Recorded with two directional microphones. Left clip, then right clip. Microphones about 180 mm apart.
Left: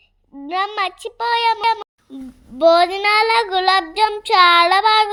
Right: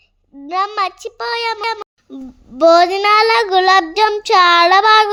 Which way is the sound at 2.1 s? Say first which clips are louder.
Right 2 dB; 15° right (ahead or behind).